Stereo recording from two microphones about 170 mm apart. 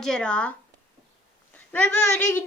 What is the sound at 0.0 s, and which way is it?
Speech, 5° left (ahead or behind).